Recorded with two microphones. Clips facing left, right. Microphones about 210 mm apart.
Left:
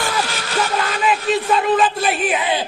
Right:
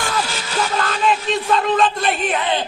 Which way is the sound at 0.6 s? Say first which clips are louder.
Even; 10° left (ahead or behind).